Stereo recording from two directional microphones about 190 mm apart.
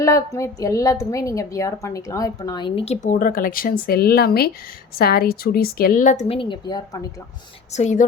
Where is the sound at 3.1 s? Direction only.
45° left (ahead or behind); by 7.2 s 15° left (ahead or behind).